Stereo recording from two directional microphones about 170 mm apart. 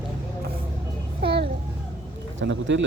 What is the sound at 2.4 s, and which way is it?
Speech, 90° right.